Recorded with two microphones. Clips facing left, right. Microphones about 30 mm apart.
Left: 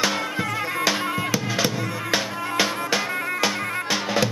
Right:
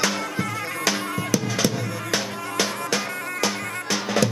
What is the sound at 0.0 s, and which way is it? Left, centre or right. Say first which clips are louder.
Music: left 1 dB; centre.